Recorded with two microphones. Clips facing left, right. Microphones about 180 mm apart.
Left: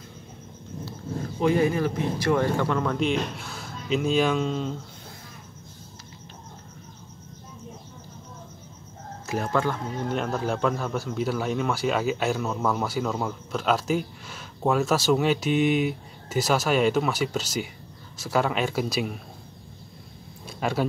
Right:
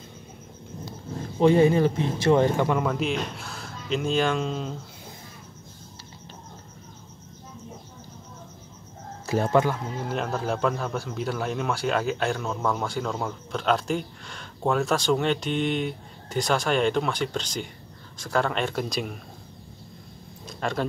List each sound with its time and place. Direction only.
1.4 s a man's voice: 30° right (ahead or behind); by 4.7 s centre (ahead or behind)
9.2 s chicken: 30° right (ahead or behind)
9.5 s speech: 15° right (ahead or behind)
10.0 s a man's voice: centre (ahead or behind)
20.4 s a sound: 5° left (ahead or behind)